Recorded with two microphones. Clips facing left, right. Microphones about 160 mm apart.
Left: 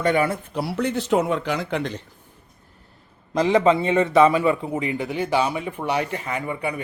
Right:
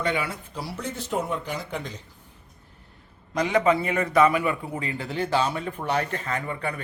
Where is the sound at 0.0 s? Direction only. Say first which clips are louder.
Left 7 dB; 50° left (ahead or behind); by 2.0 s 75° left (ahead or behind).